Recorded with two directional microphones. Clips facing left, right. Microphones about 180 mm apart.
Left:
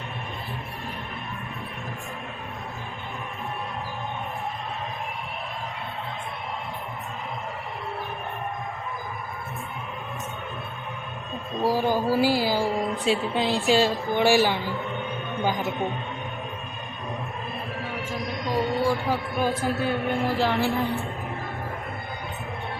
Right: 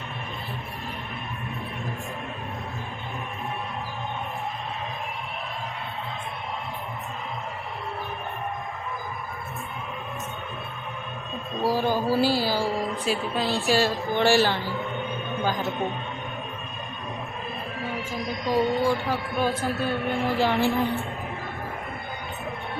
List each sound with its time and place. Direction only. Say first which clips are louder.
11.6 s a woman's voice: left 1 dB; 15° left (ahead or behind)
18.3 s a sound: right 3 dB; centre (ahead or behind)
19.0 s a man's voice: left 1 dB; 15° left (ahead or behind)
20.2 s music: right 3 dB; centre (ahead or behind)